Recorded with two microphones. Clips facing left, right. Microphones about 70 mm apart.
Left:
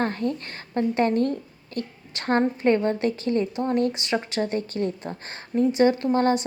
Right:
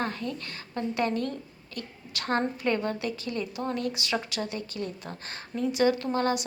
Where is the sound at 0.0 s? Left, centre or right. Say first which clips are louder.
Left 6 dB; left.